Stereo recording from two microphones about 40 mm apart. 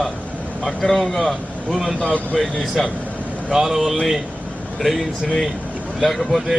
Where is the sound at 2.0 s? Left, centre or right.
Left.